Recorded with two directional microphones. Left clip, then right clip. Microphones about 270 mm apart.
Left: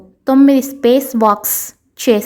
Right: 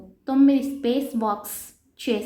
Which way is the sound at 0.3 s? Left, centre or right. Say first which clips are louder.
Left 9 dB; left.